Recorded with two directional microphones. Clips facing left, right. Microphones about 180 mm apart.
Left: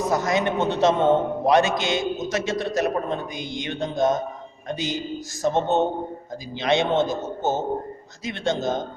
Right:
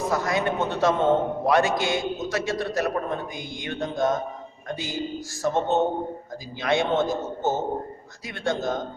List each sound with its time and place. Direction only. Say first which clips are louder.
0.1 s a man's voice: left 2 dB; 20° left (ahead or behind)